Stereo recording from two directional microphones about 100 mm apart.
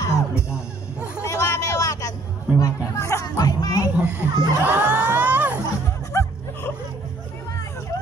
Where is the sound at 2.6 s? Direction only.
30° left (ahead or behind).